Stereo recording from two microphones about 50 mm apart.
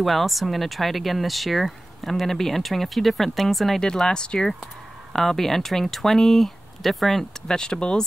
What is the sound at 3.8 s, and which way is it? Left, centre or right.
Speech, centre.